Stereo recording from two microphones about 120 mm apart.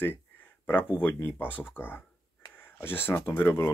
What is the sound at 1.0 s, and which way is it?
Speech, 15° left (ahead or behind).